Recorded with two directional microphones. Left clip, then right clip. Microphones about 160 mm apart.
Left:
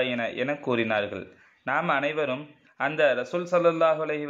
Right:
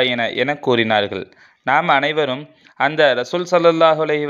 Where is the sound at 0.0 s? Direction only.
40° right (ahead or behind).